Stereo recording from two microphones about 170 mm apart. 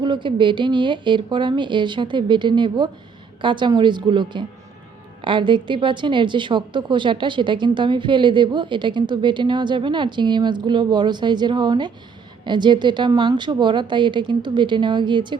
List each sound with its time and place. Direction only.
0.0 s a woman's voice: 30° right (ahead or behind)